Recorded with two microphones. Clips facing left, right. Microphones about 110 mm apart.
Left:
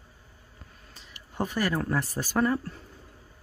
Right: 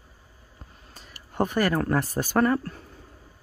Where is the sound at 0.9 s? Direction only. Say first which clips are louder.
Right 5 dB; 45° right (ahead or behind); by 2.7 s 65° right (ahead or behind).